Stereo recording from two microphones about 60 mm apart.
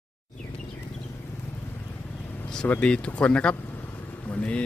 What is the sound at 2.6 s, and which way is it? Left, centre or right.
Speech, left.